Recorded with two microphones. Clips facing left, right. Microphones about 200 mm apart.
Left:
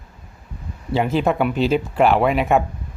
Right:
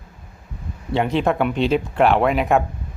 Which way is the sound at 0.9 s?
Centre (ahead or behind).